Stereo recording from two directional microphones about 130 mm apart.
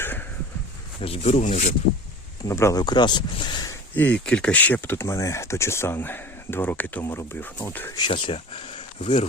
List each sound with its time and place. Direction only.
1.0 s speech: 50° left (ahead or behind)
2.5 s speech: 25° left (ahead or behind)
2.8 s speech: 35° left (ahead or behind)
3.9 s speech: 10° left (ahead or behind)
7.9 s speech: 40° left (ahead or behind)